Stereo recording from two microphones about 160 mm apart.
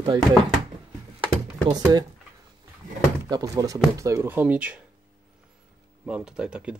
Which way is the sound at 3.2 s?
25° right (ahead or behind).